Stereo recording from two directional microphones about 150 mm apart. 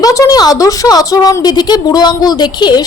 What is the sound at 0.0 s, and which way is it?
Speech, 20° left (ahead or behind).